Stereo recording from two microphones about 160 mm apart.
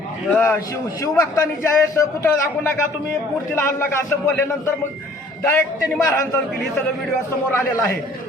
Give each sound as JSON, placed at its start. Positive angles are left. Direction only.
{"t": 0.3, "sound": "a man's voice", "side_deg": 10}
{"t": 3.8, "sound": "a man's voice", "side_deg": 15}
{"t": 7.5, "sound": "a man's voice", "side_deg": 15}